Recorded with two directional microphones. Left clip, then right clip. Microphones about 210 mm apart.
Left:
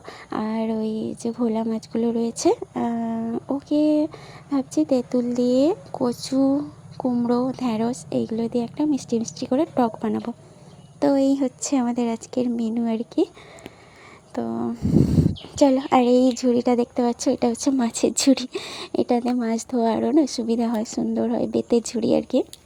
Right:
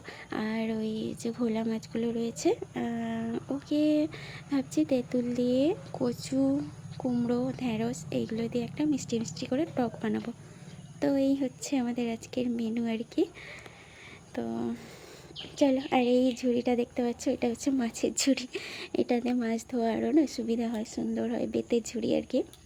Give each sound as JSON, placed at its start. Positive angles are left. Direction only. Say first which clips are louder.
{"t": 0.3, "sound": "speech", "louder": "left 7 dB", "side_deg": 20}
{"t": 14.3, "sound": "speech", "louder": "left 7 dB", "side_deg": 20}